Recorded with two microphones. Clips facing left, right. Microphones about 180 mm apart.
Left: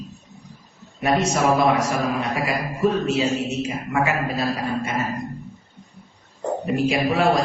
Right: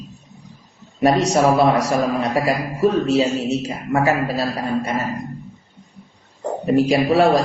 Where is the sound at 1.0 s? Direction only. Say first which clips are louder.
Right 5 dB; 35° right (ahead or behind).